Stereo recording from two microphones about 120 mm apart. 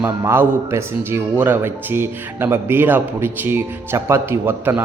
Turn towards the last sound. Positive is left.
turn(degrees=-20)  # may be behind; listen again after turning